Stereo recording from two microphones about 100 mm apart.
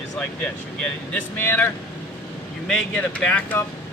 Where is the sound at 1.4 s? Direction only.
25° left (ahead or behind).